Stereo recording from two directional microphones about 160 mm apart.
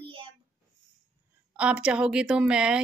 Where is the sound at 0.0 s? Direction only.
35° right (ahead or behind).